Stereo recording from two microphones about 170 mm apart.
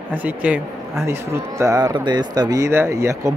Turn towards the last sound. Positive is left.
turn(degrees=-20)  # may be behind; listen again after turning